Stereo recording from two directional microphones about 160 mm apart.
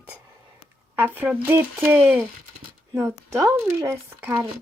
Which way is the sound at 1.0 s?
10° right (ahead or behind).